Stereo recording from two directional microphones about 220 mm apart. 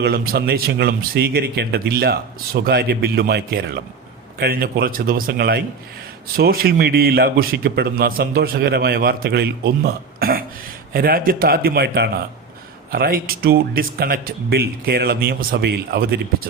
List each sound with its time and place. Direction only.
0.0 s a man's voice: 45° right (ahead or behind)